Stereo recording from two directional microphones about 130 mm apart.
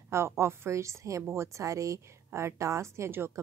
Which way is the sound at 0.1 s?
20° right (ahead or behind).